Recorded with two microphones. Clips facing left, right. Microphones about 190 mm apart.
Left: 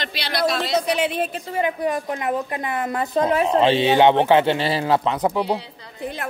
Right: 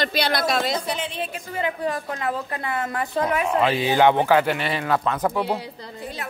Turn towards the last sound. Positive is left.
turn(degrees=15)  # may be behind; listen again after turning